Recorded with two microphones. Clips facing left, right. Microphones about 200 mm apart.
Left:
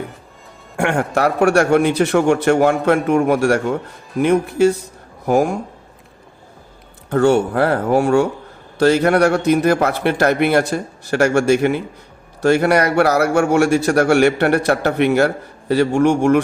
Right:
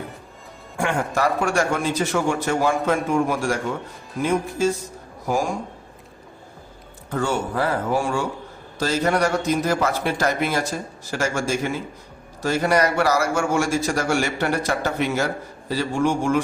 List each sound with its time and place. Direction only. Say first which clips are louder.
0.8 s a man's voice: left 5 dB; 65° left (ahead or behind)
7.1 s a man's voice: left 10 dB; 65° left (ahead or behind)